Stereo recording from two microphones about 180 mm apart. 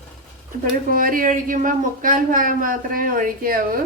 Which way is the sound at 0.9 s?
50° right (ahead or behind).